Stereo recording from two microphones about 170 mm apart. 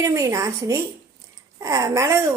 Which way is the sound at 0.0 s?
20° right (ahead or behind).